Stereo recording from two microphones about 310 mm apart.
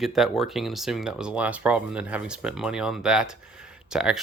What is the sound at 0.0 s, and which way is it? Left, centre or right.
Speech, centre.